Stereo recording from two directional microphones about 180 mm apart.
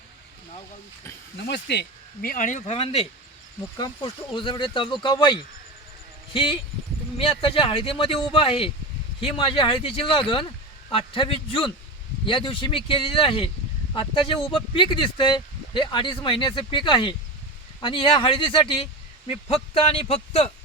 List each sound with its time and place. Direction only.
1.4 s speech: 70° left (ahead or behind); by 20.5 s 30° left (ahead or behind)